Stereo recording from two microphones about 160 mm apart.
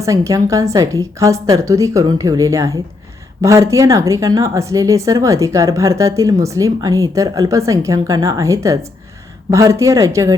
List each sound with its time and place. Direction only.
0.0 s speech: 20° right (ahead or behind)